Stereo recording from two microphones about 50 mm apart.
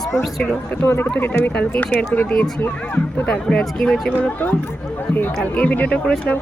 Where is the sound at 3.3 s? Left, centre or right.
Centre.